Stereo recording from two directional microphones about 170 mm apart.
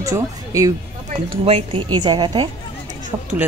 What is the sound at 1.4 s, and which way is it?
Speech, 35° right (ahead or behind).